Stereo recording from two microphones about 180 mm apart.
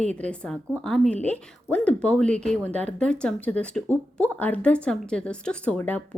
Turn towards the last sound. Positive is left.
turn(degrees=10)  # may be behind; listen again after turning